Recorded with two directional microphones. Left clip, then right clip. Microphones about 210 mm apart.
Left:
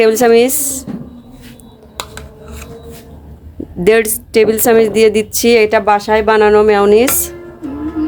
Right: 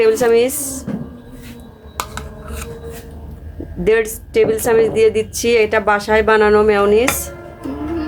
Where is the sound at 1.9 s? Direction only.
Centre (ahead or behind).